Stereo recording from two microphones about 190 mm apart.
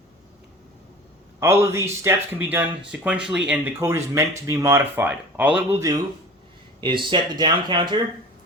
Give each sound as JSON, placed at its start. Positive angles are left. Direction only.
{"t": 1.4, "sound": "speech", "side_deg": -15}
{"t": 6.8, "sound": "speech", "side_deg": -25}